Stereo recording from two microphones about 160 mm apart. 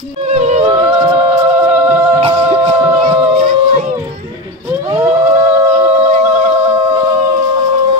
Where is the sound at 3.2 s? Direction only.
40° right (ahead or behind).